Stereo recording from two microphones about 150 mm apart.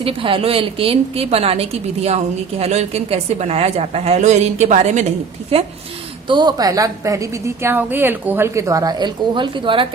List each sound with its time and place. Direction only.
0.0 s a woman's voice: 35° right (ahead or behind)
6.2 s a woman's voice: 30° right (ahead or behind)